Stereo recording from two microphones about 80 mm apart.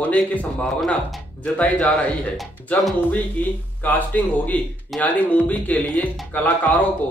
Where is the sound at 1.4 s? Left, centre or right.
Centre.